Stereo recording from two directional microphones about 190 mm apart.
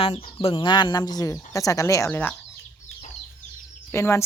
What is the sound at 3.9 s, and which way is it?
Speech, 15° left (ahead or behind).